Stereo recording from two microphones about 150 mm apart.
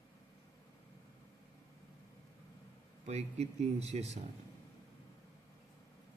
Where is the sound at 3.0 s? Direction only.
45° right (ahead or behind).